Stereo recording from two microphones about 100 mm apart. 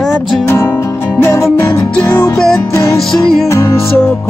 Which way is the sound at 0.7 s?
25° left (ahead or behind).